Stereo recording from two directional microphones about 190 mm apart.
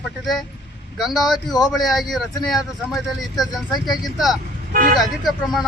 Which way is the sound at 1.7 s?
Centre (ahead or behind).